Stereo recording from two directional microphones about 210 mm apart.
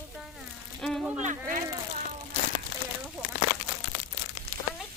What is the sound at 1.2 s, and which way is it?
Speech, 35° right (ahead or behind).